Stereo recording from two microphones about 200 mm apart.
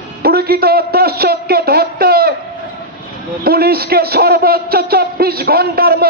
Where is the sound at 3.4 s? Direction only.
50° right (ahead or behind).